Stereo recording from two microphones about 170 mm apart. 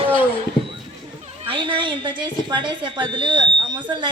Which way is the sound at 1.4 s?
30° right (ahead or behind).